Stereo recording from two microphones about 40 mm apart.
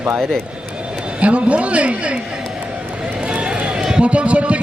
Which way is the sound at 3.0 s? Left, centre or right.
Right.